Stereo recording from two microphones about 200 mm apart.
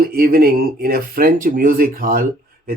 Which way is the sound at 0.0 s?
50° right (ahead or behind).